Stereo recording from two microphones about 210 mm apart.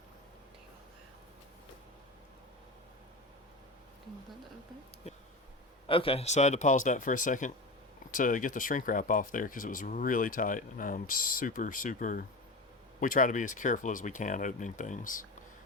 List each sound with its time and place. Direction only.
5.0 s bee: 30° left (ahead or behind)
5.9 s speech: 25° left (ahead or behind)